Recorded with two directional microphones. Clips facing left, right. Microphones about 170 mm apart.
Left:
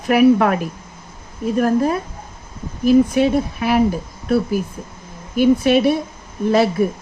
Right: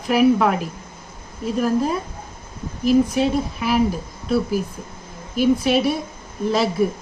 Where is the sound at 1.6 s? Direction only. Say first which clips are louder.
Left 3 dB; 55° left (ahead or behind).